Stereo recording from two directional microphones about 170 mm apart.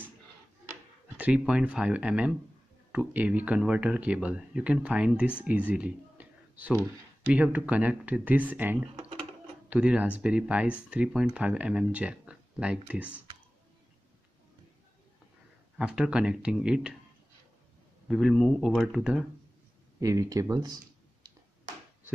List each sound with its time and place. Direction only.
1.1 s speech: 5° right (ahead or behind)
15.8 s speech: 5° right (ahead or behind)
18.0 s speech: centre (ahead or behind)
20.0 s speech: 20° right (ahead or behind)